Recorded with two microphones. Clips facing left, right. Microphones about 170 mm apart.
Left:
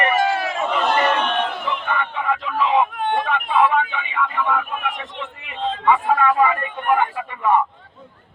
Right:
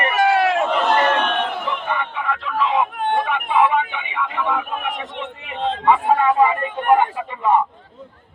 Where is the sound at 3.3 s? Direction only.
10° right (ahead or behind).